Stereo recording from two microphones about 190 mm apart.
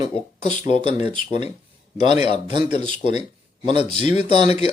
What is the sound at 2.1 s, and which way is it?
Speech, 35° left (ahead or behind).